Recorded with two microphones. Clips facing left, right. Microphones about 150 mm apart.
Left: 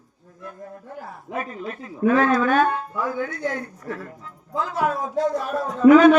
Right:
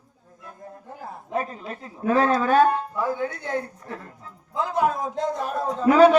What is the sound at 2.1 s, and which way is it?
Speech, 30° right (ahead or behind).